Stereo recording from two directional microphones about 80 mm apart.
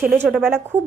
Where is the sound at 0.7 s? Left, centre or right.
Right.